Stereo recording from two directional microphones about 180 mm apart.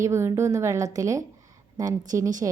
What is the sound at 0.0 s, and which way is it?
A woman's voice, 15° right (ahead or behind).